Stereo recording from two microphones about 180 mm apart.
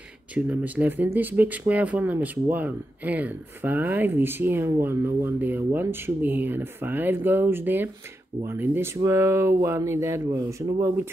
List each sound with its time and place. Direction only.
0.3 s speech: 5° right (ahead or behind)